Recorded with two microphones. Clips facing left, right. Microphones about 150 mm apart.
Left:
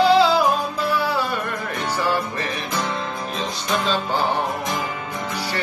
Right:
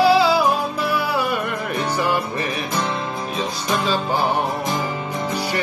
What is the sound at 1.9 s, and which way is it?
Music, 15° right (ahead or behind).